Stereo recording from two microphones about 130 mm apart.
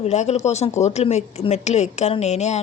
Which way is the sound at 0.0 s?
60° left (ahead or behind).